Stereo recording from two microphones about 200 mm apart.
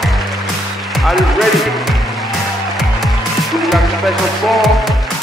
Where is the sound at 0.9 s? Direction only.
Centre (ahead or behind).